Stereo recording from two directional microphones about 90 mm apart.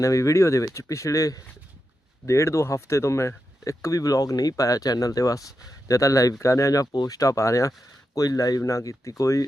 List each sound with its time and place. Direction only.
0.0 s speech: 35° left (ahead or behind)